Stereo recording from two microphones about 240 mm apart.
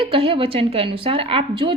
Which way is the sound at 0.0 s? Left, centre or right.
Right.